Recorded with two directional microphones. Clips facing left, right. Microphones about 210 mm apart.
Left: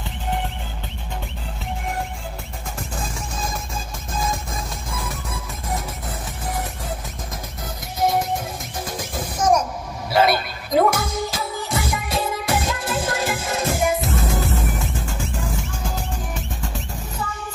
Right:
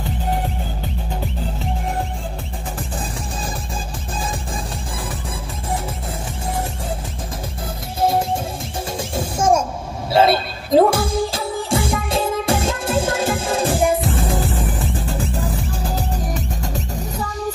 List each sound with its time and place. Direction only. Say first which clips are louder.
8.0 s music: right 2 dB; 30° right (ahead or behind)